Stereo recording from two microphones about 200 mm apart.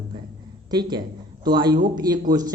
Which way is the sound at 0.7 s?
20° right (ahead or behind).